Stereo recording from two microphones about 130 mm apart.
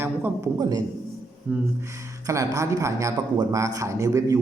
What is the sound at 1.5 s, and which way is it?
Music, 10° right (ahead or behind).